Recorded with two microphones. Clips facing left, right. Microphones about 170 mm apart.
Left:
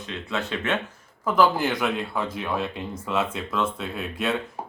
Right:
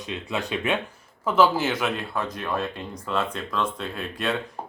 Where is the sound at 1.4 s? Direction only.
5° right (ahead or behind).